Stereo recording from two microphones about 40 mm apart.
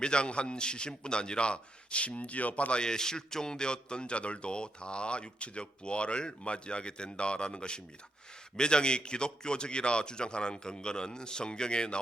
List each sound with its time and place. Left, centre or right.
0.0 s a man's voice: left
2.8 s a man's voice: centre